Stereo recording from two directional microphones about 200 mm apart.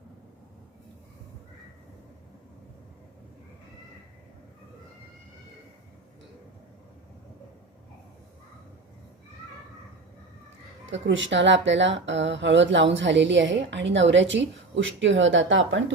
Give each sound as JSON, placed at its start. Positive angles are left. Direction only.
{"t": 10.9, "sound": "speech", "side_deg": -65}